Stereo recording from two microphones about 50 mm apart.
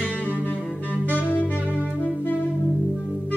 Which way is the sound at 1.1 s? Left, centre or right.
Left.